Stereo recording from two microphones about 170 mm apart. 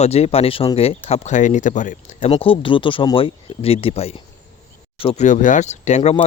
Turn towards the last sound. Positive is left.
turn(degrees=40)  # may be behind; listen again after turning